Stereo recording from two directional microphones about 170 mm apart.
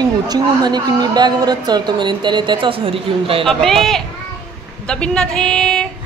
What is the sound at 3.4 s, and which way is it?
A woman's voice, centre (ahead or behind).